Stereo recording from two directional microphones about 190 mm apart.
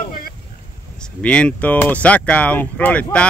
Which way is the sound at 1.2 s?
5° left (ahead or behind).